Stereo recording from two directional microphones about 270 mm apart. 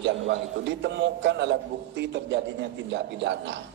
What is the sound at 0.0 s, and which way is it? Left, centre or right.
A man's voice, right.